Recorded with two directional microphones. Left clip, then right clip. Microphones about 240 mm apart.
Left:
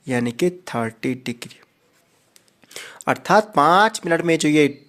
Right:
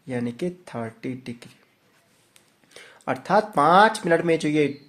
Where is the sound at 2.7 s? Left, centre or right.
Left.